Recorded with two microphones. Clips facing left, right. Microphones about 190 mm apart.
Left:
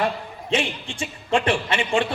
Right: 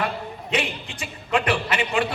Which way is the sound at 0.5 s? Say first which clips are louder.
Left 3 dB; 30° left (ahead or behind).